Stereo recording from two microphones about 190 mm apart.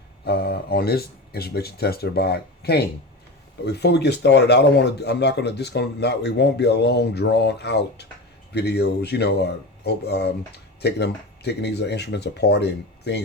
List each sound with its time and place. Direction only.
0.3 s speech: 55° left (ahead or behind)